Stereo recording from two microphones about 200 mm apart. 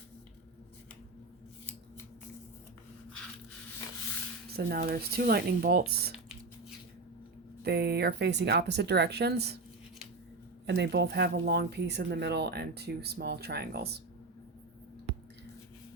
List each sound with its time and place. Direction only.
4.5 s speech: 50° right (ahead or behind)
7.6 s speech: 55° right (ahead or behind)
10.7 s speech: 55° right (ahead or behind)